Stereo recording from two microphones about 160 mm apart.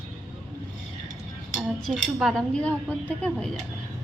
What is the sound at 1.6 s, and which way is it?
Speech, centre (ahead or behind).